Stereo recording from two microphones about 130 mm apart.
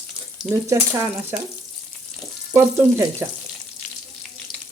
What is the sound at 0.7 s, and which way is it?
Frying, 20° right (ahead or behind).